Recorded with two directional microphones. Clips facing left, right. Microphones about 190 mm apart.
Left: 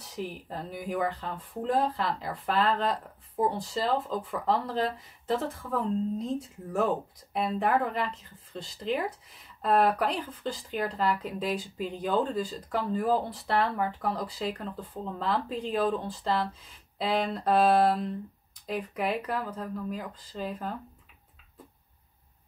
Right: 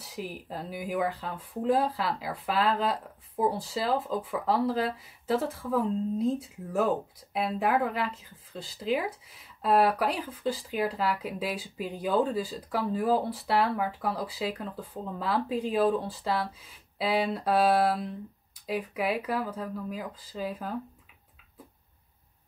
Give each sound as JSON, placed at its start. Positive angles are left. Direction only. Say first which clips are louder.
{"t": 0.0, "sound": "speech", "louder": "left 1 dB", "side_deg": -5}